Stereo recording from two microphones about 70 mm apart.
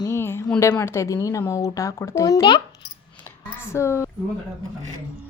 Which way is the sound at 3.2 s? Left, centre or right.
Left.